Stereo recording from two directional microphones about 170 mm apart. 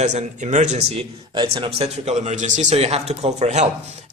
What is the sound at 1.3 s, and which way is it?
A man's voice, 30° right (ahead or behind).